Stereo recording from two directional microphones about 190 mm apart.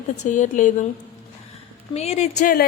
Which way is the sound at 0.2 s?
40° left (ahead or behind).